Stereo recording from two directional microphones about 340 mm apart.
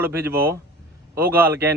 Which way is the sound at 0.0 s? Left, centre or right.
Centre.